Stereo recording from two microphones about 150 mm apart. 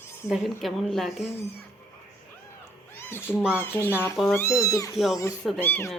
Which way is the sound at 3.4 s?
5° right (ahead or behind).